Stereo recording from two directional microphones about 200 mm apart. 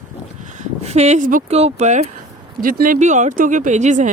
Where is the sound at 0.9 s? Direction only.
35° right (ahead or behind).